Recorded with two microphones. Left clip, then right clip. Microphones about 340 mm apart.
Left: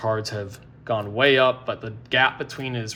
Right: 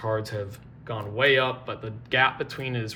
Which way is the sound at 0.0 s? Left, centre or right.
Centre.